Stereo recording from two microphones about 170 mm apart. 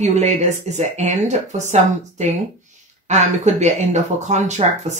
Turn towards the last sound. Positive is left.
turn(degrees=-40)  # may be behind; listen again after turning